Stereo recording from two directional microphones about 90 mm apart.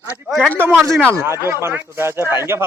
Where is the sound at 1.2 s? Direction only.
30° right (ahead or behind).